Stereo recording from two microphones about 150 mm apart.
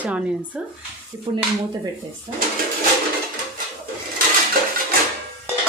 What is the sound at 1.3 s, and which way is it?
Speech, 30° right (ahead or behind).